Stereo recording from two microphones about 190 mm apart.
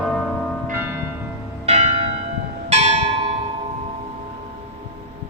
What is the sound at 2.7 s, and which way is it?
Church bell, 35° right (ahead or behind).